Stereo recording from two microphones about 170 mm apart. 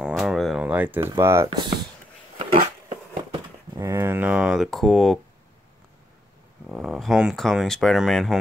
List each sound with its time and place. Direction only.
0.0 s a sound: centre (ahead or behind)
1.1 s speech: 15° right (ahead or behind)
3.7 s speech: 20° right (ahead or behind); by 5.2 s centre (ahead or behind)
6.7 s speech: centre (ahead or behind)